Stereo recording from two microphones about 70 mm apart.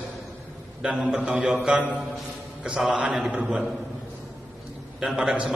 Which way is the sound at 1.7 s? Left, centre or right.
Right.